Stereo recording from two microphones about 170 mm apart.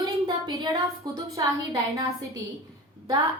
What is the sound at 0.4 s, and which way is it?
A woman's voice, 20° right (ahead or behind).